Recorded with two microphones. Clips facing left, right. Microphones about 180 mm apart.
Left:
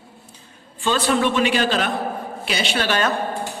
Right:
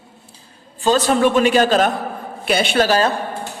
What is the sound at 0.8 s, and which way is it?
A man's voice, 40° right (ahead or behind).